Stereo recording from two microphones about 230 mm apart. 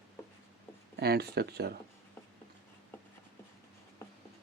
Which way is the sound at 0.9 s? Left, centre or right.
Right.